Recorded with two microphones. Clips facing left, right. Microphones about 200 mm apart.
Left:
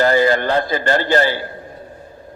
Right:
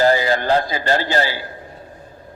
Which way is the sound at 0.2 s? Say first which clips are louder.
Left 2 dB; 50° left (ahead or behind).